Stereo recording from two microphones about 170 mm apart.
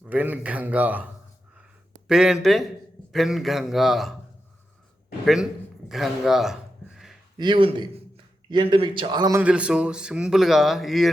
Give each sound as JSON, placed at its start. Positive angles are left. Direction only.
{"t": 0.1, "sound": "a man's voice", "side_deg": -10}
{"t": 5.2, "sound": "speech", "side_deg": 0}
{"t": 5.9, "sound": "a sound", "side_deg": 0}
{"t": 7.3, "sound": "a man's voice", "side_deg": -30}
{"t": 9.4, "sound": "speech", "side_deg": -5}